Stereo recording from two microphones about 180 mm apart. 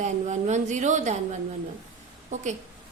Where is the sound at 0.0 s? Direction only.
40° right (ahead or behind).